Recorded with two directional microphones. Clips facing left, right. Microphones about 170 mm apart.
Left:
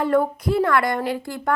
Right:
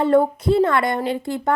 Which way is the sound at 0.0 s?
25° right (ahead or behind).